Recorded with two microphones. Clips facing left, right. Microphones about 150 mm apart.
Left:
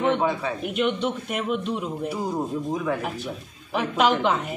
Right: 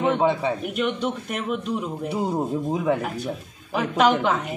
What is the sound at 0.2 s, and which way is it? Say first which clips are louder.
Speech: right 3 dB; 20° right (ahead or behind).